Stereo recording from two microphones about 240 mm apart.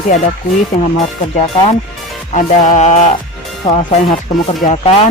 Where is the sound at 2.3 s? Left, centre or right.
Left.